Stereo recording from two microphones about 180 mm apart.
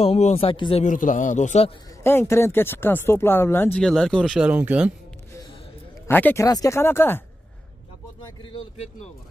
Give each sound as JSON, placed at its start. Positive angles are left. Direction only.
{"t": 0.0, "sound": "speech", "side_deg": 35}
{"t": 0.8, "sound": "a man's voice", "side_deg": 45}
{"t": 2.0, "sound": "speech", "side_deg": 15}
{"t": 6.0, "sound": "speech", "side_deg": 10}